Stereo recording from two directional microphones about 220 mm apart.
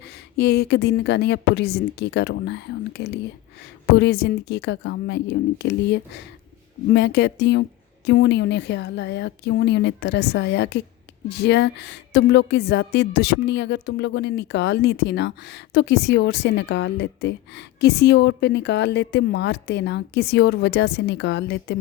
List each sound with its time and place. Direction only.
0.0 s a woman's voice: 50° left (ahead or behind)